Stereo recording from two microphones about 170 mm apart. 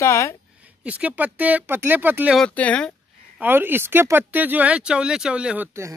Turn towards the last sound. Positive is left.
turn(degrees=-15)  # may be behind; listen again after turning